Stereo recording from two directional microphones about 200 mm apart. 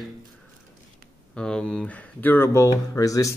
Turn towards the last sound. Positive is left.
turn(degrees=15)  # may be behind; listen again after turning